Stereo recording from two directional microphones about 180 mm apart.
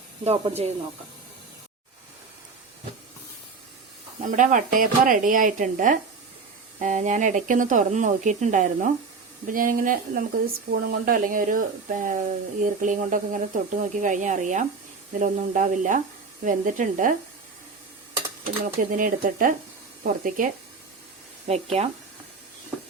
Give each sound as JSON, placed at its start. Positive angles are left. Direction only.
{"t": 0.3, "sound": "speech", "side_deg": -35}
{"t": 4.2, "sound": "speech", "side_deg": -45}
{"t": 18.6, "sound": "speech", "side_deg": -50}
{"t": 21.4, "sound": "speech", "side_deg": -35}